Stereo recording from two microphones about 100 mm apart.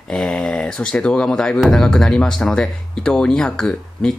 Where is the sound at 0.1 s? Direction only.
5° left (ahead or behind).